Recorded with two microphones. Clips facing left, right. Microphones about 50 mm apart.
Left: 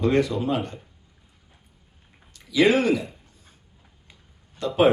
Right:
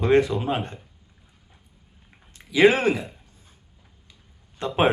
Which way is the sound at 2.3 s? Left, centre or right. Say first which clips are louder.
Right 2 dB; right.